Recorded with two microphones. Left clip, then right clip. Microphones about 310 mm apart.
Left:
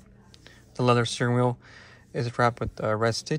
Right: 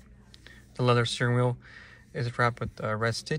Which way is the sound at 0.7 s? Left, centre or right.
Centre.